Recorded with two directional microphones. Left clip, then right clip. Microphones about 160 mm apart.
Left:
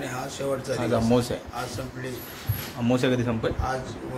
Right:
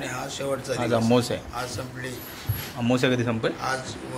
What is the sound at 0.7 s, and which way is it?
Speech, 15° right (ahead or behind).